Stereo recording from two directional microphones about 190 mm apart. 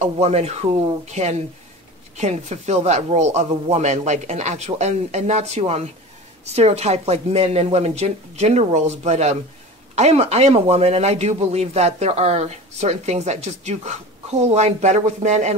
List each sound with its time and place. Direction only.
0.0 s speech: 35° right (ahead or behind)